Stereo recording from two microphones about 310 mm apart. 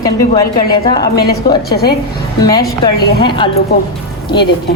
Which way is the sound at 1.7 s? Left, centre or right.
Left.